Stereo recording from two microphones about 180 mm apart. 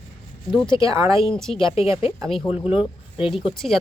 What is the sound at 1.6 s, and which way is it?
Speech, 30° left (ahead or behind).